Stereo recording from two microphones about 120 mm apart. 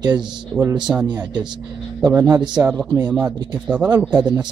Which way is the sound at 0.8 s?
10° right (ahead or behind).